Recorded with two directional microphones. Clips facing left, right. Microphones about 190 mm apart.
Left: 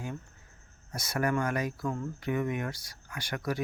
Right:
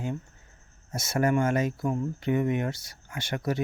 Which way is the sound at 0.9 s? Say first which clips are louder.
Right 5 dB; 25° right (ahead or behind).